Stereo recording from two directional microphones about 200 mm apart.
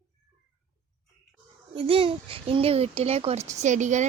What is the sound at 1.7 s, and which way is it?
A child's voice, 25° right (ahead or behind).